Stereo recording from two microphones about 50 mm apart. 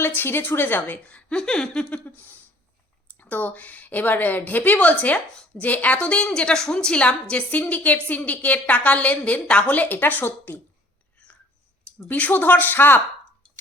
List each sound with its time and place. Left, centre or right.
0.0 s a woman's voice: left
1.1 s speech: centre
1.9 s a woman's voice: left
7.6 s a woman's voice: left
9.6 s a woman's voice: left
10.2 s a woman's voice: left
12.0 s a woman's voice: left